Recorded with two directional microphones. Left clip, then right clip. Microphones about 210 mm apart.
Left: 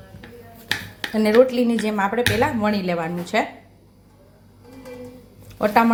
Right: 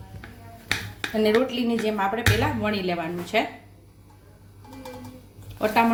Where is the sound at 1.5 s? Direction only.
25° left (ahead or behind).